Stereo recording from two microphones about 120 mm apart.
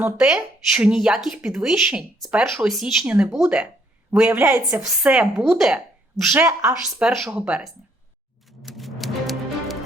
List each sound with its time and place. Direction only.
0.2 s speech: 5° right (ahead or behind)
6.3 s speech: 15° right (ahead or behind)
7.0 s speech: 5° right (ahead or behind)
8.4 s music: centre (ahead or behind)